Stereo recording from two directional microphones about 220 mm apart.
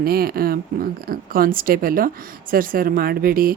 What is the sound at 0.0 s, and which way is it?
Speech, 45° right (ahead or behind).